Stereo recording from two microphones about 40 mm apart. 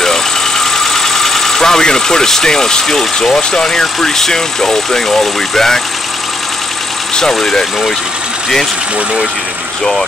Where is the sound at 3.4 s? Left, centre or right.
Centre.